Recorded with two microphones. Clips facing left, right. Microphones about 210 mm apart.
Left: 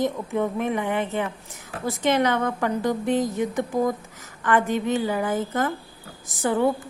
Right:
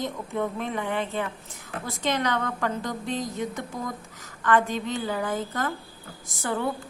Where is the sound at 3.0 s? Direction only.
55° left (ahead or behind).